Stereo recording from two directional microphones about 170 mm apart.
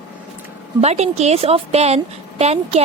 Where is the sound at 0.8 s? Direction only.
40° right (ahead or behind).